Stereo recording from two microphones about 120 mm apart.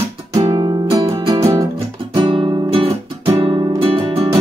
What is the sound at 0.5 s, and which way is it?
Music, 35° right (ahead or behind).